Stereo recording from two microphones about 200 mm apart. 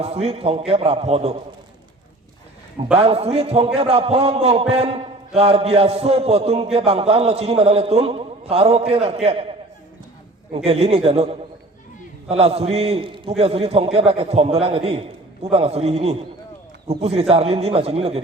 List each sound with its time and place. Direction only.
0.0 s a man's voice: 30° right (ahead or behind)
2.9 s a man's voice: 30° right (ahead or behind)
10.5 s a man's voice: 30° right (ahead or behind)